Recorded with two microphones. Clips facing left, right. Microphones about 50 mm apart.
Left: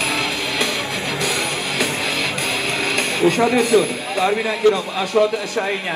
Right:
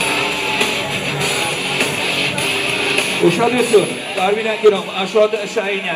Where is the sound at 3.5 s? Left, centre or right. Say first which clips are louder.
Right 2 dB; right.